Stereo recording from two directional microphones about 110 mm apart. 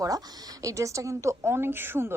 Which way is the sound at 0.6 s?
30° right (ahead or behind).